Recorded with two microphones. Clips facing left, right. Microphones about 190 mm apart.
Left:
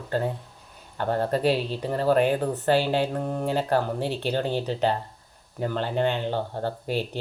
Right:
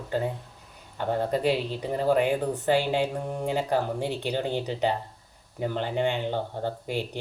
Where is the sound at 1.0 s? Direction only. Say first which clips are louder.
Left 2 dB; 15° right (ahead or behind).